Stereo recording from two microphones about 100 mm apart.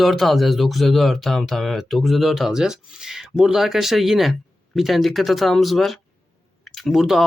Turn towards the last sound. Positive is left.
turn(degrees=0)  # may be behind; listen again after turning